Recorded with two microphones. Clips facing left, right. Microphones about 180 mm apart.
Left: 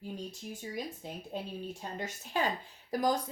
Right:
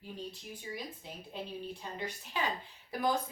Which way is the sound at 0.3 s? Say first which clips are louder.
Left 2 dB; 45° left (ahead or behind).